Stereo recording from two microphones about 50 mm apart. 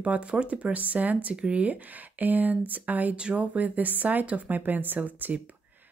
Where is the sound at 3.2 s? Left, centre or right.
Right.